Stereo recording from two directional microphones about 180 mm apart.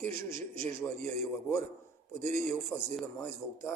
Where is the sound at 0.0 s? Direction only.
15° left (ahead or behind).